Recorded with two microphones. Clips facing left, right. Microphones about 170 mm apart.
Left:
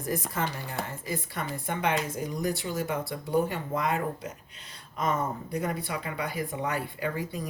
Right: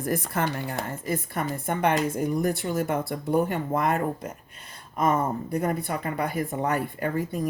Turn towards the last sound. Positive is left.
turn(degrees=-50)  # may be behind; listen again after turning